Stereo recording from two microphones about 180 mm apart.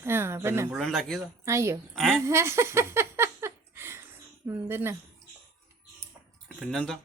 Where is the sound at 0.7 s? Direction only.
Centre (ahead or behind).